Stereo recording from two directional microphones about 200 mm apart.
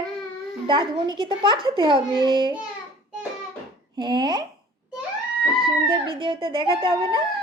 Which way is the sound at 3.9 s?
20° right (ahead or behind).